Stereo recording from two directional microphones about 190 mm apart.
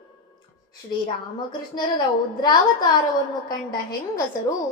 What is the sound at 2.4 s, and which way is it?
Speech, 20° left (ahead or behind).